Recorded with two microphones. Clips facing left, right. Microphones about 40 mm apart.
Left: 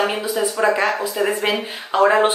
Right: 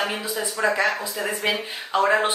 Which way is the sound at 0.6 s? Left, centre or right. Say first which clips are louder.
Left 2 dB; left.